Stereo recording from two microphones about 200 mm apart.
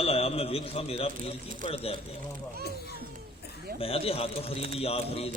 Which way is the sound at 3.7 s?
30° left (ahead or behind).